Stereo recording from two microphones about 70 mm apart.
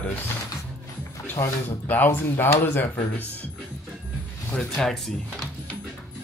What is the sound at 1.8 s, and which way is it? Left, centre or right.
Speech, left.